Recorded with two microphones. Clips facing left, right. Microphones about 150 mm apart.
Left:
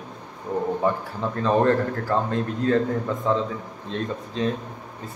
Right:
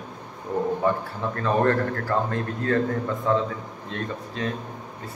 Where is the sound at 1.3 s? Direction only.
15° left (ahead or behind).